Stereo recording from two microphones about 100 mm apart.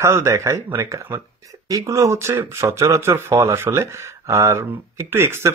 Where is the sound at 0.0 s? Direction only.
30° right (ahead or behind).